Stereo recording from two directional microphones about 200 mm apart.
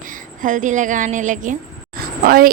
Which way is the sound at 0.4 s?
40° right (ahead or behind).